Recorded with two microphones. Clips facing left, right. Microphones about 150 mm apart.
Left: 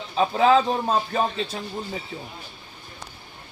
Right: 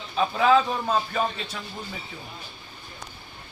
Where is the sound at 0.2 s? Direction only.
30° left (ahead or behind).